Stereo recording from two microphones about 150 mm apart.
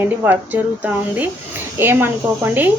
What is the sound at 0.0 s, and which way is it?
Speech, 15° right (ahead or behind).